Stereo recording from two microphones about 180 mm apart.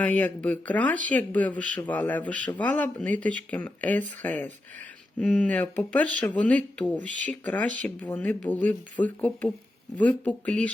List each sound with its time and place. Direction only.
0.0 s speech: 10° left (ahead or behind)